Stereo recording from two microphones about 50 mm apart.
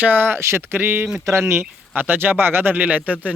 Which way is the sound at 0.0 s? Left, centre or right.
Right.